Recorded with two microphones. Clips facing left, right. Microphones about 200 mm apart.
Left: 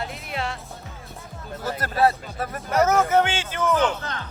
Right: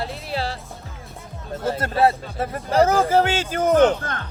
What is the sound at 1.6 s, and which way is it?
A man's voice, 25° right (ahead or behind).